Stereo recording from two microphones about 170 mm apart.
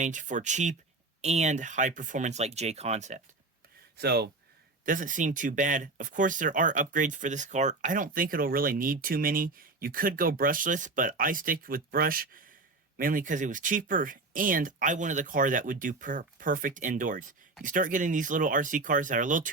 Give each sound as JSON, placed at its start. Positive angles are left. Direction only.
{"t": 0.0, "sound": "speech", "side_deg": -50}
{"t": 3.9, "sound": "speech", "side_deg": -75}
{"t": 4.9, "sound": "speech", "side_deg": -50}